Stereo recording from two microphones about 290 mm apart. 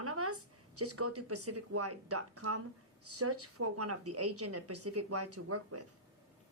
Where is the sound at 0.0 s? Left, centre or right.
Right.